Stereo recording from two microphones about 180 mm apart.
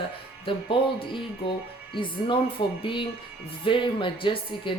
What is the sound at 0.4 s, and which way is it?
Speech, 30° left (ahead or behind).